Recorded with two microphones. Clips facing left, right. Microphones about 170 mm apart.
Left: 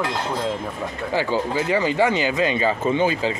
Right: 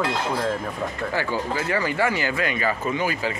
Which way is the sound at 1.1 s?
20° left (ahead or behind).